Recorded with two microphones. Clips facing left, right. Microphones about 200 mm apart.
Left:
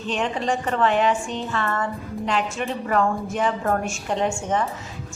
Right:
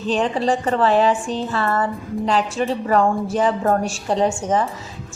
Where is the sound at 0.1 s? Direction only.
35° right (ahead or behind).